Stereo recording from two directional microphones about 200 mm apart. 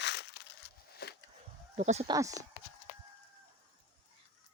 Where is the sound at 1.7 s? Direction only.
35° right (ahead or behind).